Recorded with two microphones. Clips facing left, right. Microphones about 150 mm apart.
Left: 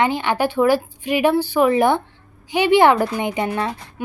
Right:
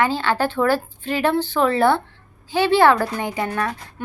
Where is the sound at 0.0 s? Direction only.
15° left (ahead or behind).